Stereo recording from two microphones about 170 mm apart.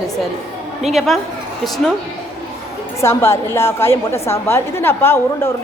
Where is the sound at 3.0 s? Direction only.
15° left (ahead or behind).